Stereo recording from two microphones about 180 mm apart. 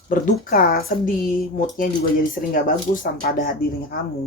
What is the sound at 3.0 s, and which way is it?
Speech, 50° left (ahead or behind).